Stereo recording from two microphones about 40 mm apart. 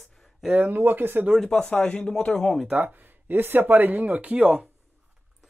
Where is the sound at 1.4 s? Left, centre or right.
Centre.